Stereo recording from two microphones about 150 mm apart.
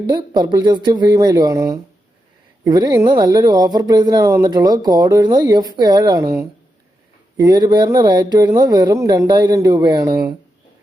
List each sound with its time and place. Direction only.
0.1 s speech: 30° right (ahead or behind)